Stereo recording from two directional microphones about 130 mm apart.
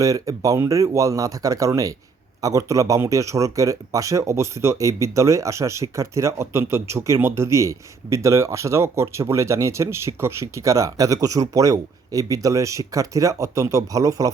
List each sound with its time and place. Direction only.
0.0 s speech: 25° right (ahead or behind)